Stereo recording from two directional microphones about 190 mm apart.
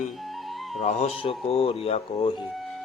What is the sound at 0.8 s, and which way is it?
A man's voice, 35° left (ahead or behind).